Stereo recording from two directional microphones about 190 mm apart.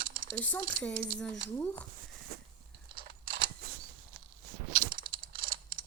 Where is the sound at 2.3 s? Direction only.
55° right (ahead or behind).